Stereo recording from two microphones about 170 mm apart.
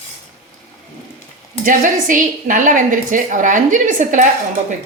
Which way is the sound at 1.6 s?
50° right (ahead or behind).